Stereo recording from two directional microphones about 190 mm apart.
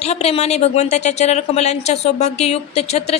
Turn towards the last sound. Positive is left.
turn(degrees=35)  # may be behind; listen again after turning